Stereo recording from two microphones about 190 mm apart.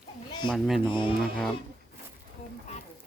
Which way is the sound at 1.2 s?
Centre (ahead or behind).